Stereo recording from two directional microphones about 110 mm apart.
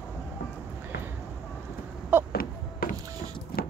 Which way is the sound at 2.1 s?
20° right (ahead or behind).